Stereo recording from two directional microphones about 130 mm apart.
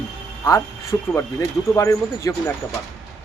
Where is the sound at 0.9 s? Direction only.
15° left (ahead or behind).